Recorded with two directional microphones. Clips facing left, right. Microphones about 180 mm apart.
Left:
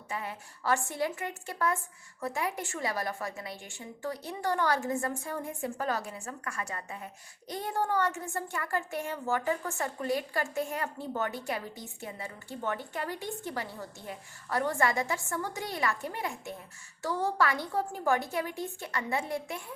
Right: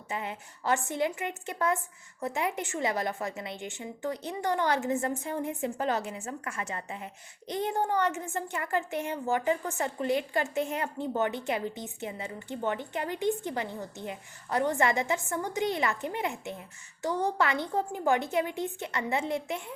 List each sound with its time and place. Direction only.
0.1 s a woman's voice: 20° right (ahead or behind)